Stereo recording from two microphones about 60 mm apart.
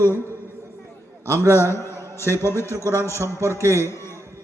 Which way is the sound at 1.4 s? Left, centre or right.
Right.